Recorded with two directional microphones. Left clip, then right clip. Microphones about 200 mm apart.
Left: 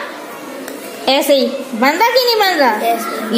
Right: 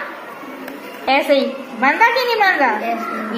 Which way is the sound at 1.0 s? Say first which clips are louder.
Left 3 dB; 45° left (ahead or behind).